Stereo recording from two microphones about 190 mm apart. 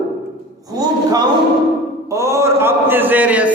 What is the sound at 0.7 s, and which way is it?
A man's voice, 20° right (ahead or behind).